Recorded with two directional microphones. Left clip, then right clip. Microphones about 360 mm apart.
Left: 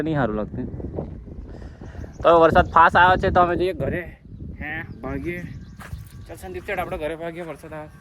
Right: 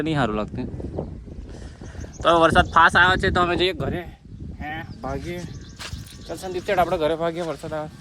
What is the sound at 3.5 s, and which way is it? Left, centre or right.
Speech, right.